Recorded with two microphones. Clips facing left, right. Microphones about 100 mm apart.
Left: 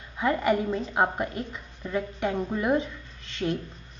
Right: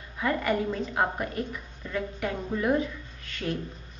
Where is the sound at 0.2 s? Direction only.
20° left (ahead or behind).